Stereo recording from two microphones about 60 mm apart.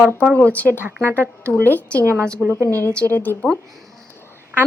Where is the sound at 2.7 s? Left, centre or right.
Right.